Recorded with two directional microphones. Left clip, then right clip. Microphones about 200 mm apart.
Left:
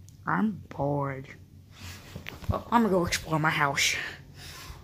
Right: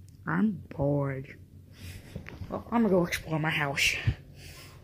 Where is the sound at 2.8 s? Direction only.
20° right (ahead or behind).